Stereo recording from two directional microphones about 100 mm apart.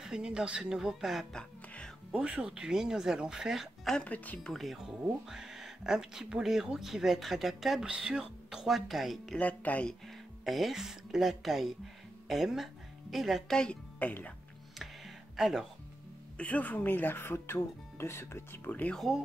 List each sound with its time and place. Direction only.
0.0 s speech: 5° right (ahead or behind)
4.0 s speech: 15° left (ahead or behind)
4.5 s speech: centre (ahead or behind)
9.4 s speech: 15° left (ahead or behind)
10.0 s speech: centre (ahead or behind)
15.3 s speech: centre (ahead or behind)
16.3 s speech: 15° left (ahead or behind)
18.9 s speech: centre (ahead or behind)